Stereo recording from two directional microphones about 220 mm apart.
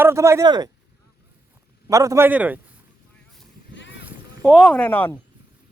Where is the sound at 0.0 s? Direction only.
10° right (ahead or behind).